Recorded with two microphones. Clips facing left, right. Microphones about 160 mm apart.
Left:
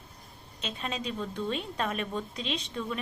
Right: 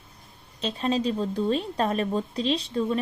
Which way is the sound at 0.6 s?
35° right (ahead or behind).